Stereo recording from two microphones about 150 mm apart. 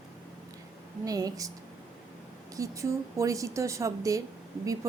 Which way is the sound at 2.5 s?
20° right (ahead or behind).